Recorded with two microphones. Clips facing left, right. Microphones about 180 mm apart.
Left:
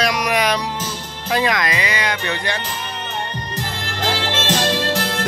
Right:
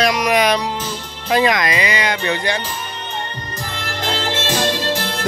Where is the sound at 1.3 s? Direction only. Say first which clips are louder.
Right 3 dB; 20° right (ahead or behind).